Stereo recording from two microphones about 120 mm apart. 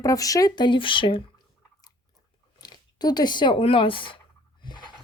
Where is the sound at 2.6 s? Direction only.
35° left (ahead or behind).